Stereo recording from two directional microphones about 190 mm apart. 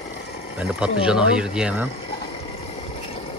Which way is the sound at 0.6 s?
5° right (ahead or behind).